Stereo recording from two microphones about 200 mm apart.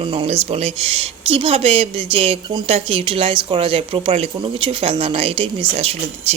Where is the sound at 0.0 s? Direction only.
25° right (ahead or behind).